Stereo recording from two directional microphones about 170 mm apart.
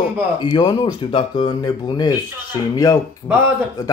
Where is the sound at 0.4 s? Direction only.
25° left (ahead or behind).